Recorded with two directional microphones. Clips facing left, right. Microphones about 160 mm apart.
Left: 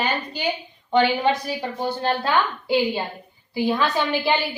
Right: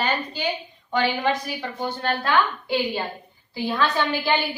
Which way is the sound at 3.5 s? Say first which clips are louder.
Left 3 dB; 10° left (ahead or behind).